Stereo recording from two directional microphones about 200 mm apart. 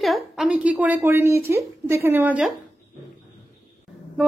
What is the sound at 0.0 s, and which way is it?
A woman's voice, centre (ahead or behind).